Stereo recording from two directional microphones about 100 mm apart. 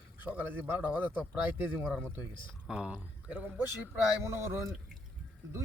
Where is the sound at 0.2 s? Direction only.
15° right (ahead or behind).